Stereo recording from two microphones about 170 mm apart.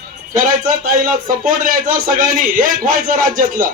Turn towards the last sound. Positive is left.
turn(degrees=-55)  # may be behind; listen again after turning